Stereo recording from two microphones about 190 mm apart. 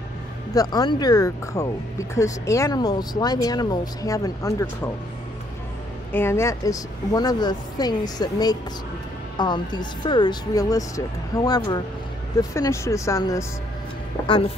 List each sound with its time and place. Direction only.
0.6 s speech: 20° left (ahead or behind)
6.1 s speech: 15° left (ahead or behind)